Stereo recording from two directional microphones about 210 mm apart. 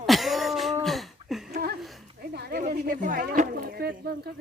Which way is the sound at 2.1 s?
50° right (ahead or behind).